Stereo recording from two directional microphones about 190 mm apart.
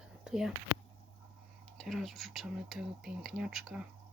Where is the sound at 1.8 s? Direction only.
Centre (ahead or behind).